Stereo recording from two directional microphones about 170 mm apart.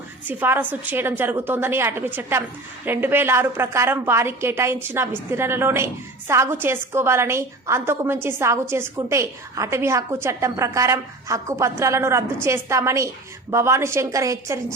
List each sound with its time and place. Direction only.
0.3 s a woman's voice: 10° right (ahead or behind)